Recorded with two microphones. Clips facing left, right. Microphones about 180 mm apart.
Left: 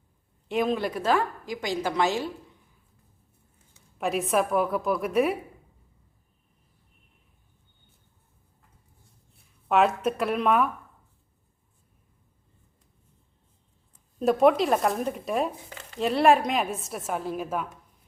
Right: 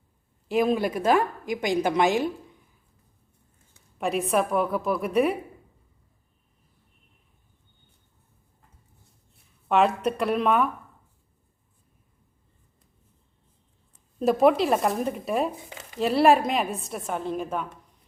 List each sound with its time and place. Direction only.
0.4 s a woman's voice: 5° right (ahead or behind)
3.9 s a woman's voice: centre (ahead or behind)
9.6 s a woman's voice: centre (ahead or behind)
14.2 s a woman's voice: centre (ahead or behind)